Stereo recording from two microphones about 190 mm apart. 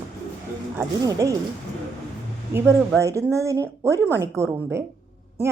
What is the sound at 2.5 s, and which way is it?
A woman's voice, 10° right (ahead or behind).